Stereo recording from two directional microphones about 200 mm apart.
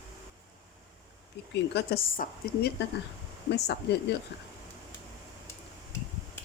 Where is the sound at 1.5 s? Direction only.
55° left (ahead or behind).